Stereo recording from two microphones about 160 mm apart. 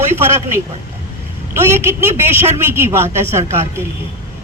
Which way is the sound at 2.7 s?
15° right (ahead or behind).